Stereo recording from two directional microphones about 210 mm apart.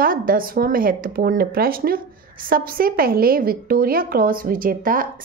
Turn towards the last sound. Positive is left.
turn(degrees=-40)  # may be behind; listen again after turning